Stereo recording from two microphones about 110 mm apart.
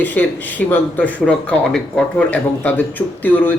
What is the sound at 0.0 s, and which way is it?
A man's voice, 15° left (ahead or behind).